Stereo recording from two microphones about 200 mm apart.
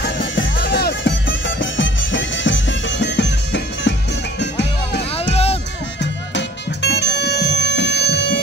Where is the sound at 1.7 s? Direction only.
70° left (ahead or behind).